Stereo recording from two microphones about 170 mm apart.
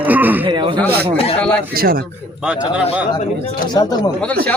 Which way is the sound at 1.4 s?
5° left (ahead or behind).